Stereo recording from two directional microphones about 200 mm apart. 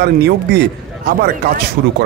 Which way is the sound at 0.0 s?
55° right (ahead or behind).